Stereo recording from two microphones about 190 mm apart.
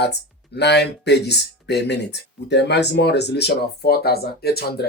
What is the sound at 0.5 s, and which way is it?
Speech, 60° left (ahead or behind).